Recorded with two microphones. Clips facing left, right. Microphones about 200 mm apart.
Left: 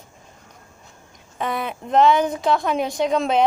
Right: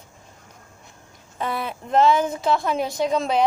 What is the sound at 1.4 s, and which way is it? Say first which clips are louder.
Speech: left 2 dB; centre (ahead or behind).